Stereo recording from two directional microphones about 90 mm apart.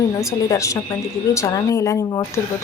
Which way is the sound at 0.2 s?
35° left (ahead or behind).